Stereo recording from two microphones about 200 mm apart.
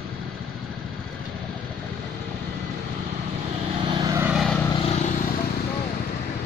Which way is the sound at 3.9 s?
15° right (ahead or behind).